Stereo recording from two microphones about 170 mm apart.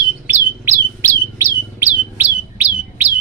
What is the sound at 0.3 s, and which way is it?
Bird, 15° right (ahead or behind).